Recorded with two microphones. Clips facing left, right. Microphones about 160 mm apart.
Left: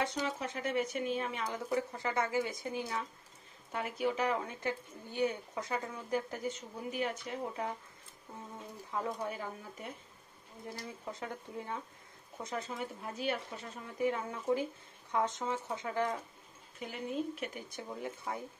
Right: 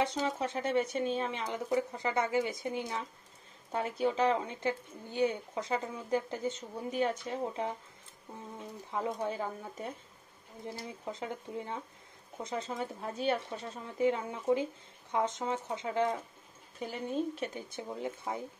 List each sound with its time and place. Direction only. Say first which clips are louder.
0.4 s speech: right 5 dB; 30° right (ahead or behind)
3.7 s speech: right 3 dB; 30° right (ahead or behind)
8.9 s speech: right 3 dB; 20° right (ahead or behind)
9.4 s speech: right 5 dB; 35° right (ahead or behind)
10.7 s speech: right 2 dB; 20° right (ahead or behind)
16.8 s speech: right 3 dB; 30° right (ahead or behind)